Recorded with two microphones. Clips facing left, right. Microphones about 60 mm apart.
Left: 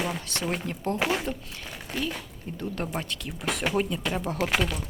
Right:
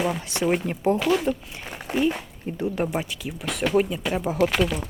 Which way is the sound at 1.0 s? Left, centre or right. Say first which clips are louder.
Right 1 dB; centre.